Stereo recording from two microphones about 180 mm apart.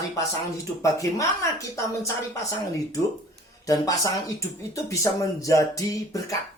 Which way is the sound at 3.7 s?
20° left (ahead or behind).